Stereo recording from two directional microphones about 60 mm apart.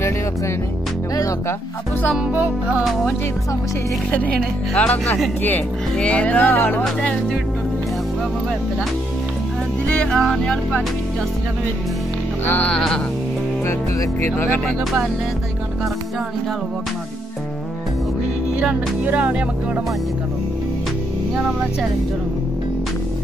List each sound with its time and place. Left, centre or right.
2.3 s speech: right
2.8 s music: centre
4.1 s speech: left
10.1 s music: centre
14.2 s speech: left
19.0 s speech: right